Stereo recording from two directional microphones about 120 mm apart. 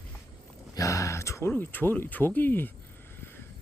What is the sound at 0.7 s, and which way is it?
Speech, 25° left (ahead or behind).